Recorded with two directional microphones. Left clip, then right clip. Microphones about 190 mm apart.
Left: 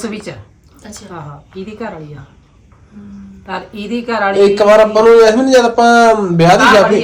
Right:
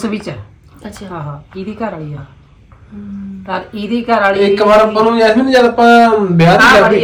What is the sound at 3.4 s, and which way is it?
Speech, 5° left (ahead or behind).